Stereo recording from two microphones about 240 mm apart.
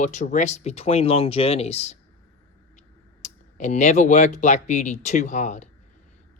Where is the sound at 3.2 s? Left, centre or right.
Left.